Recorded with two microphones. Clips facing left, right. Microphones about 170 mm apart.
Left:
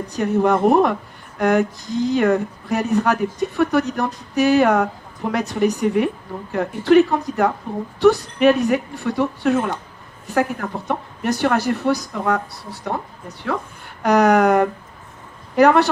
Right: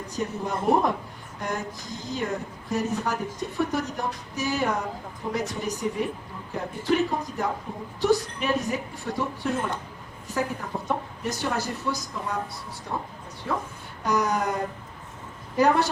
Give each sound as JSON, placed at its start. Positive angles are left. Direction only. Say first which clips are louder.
{"t": 0.1, "sound": "speech", "louder": "left 12 dB", "side_deg": 75}